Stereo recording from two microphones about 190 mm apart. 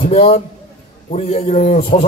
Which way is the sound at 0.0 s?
30° left (ahead or behind).